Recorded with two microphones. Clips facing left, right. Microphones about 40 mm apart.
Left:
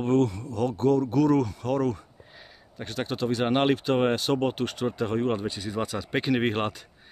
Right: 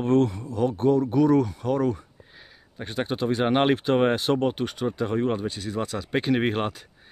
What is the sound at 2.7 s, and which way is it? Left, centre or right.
Speech, centre.